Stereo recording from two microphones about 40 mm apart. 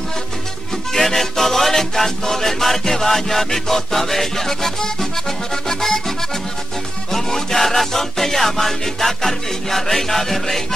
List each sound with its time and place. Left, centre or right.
0.9 s music: centre